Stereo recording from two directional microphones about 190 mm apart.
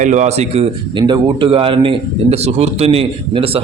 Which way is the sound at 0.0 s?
40° right (ahead or behind).